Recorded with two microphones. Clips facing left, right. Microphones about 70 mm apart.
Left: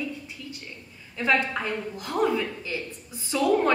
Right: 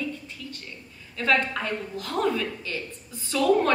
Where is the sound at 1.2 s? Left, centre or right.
Centre.